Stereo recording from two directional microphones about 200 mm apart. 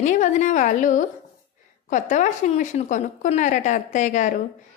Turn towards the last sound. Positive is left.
turn(degrees=40)  # may be behind; listen again after turning